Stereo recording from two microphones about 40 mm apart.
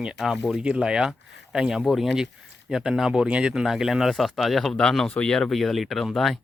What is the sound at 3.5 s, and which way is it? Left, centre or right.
Speech, centre.